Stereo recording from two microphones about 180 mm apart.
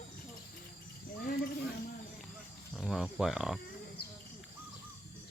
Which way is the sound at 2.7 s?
5° right (ahead or behind).